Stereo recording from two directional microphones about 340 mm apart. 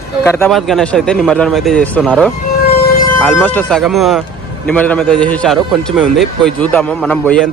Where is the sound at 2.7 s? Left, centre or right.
Left.